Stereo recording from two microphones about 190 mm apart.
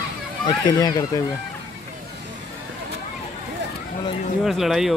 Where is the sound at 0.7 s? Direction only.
20° left (ahead or behind).